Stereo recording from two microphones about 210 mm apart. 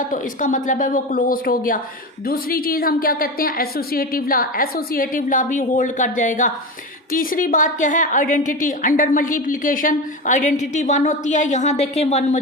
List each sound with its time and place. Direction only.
0.1 s a woman's voice: 40° left (ahead or behind)